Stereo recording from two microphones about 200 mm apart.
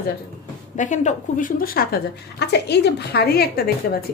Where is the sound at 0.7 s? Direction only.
35° left (ahead or behind).